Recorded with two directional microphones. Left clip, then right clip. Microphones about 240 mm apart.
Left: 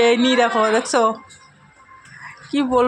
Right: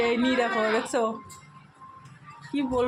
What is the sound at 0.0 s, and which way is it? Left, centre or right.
Speech, centre.